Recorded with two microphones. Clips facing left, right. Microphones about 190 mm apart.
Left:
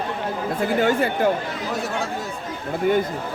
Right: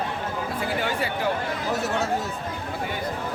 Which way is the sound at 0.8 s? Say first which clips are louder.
Left 10 dB; 50° left (ahead or behind).